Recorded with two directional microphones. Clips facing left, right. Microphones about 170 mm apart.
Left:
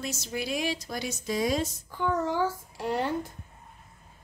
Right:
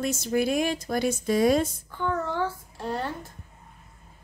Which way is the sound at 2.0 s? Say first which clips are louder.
Left 1 dB; 10° left (ahead or behind).